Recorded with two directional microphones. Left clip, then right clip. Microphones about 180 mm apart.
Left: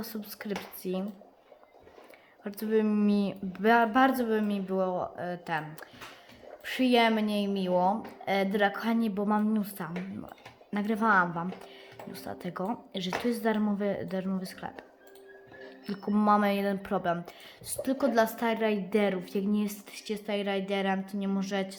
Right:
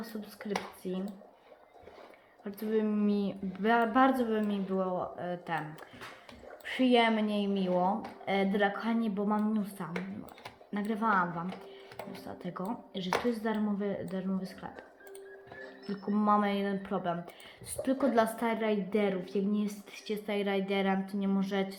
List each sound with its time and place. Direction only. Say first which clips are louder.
0.0 s a woman's voice: left 3 dB; 40° left (ahead or behind)
2.4 s a woman's voice: left 4 dB; 35° left (ahead or behind)
6.7 s a woman's voice: left 2 dB; 25° left (ahead or behind)
15.9 s a woman's voice: left 3 dB; 40° left (ahead or behind)
17.8 s a woman's voice: left 2 dB; 15° left (ahead or behind)